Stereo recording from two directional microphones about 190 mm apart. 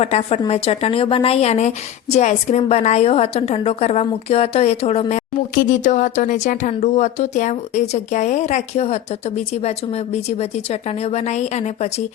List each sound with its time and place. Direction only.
0.0 s a woman's voice: 35° left (ahead or behind)